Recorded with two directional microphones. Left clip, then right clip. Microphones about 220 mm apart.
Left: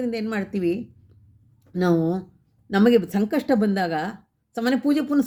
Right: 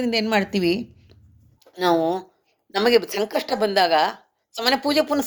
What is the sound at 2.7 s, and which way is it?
Speech, 10° left (ahead or behind).